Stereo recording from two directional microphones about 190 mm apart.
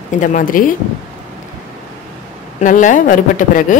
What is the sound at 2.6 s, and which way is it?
Speech, 45° left (ahead or behind).